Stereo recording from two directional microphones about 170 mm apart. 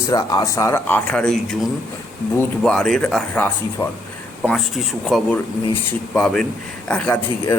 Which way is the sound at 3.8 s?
25° left (ahead or behind).